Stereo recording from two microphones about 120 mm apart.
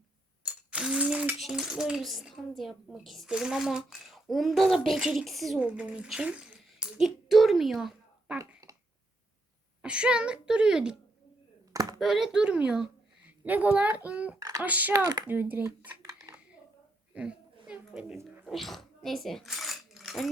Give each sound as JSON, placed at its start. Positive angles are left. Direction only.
{"t": 0.4, "sound": "a child's voice", "side_deg": -10}
{"t": 8.7, "sound": "a sound", "side_deg": -30}
{"t": 9.8, "sound": "a woman's voice", "side_deg": -10}
{"t": 11.7, "sound": "a sound", "side_deg": -30}
{"t": 11.9, "sound": "a woman's voice", "side_deg": 0}
{"t": 14.3, "sound": "speech", "side_deg": -30}
{"t": 14.6, "sound": "a woman's voice", "side_deg": -15}
{"t": 14.9, "sound": "speech", "side_deg": -35}
{"t": 15.3, "sound": "a woman's voice", "side_deg": -15}
{"t": 16.0, "sound": "a sound", "side_deg": -30}
{"t": 17.2, "sound": "a sound", "side_deg": -10}
{"t": 18.4, "sound": "coin", "side_deg": 0}